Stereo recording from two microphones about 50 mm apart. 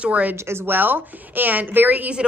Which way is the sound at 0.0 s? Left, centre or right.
Right.